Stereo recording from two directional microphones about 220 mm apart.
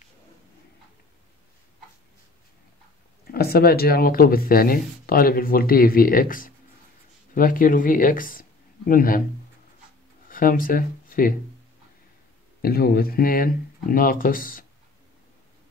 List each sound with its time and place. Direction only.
3.3 s speech: 45° left (ahead or behind)
10.2 s speech: 40° left (ahead or behind)
12.6 s speech: 45° left (ahead or behind)